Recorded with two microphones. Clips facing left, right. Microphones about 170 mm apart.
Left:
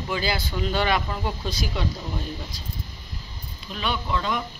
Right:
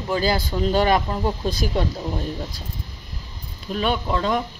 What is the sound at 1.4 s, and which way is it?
Speech, 50° right (ahead or behind).